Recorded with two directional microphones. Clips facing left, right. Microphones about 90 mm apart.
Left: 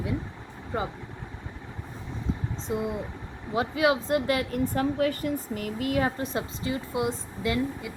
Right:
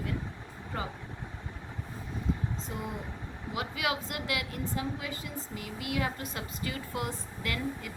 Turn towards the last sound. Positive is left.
turn(degrees=20)  # may be behind; listen again after turning